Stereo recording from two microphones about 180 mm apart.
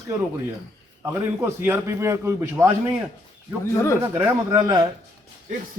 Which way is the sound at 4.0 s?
10° right (ahead or behind).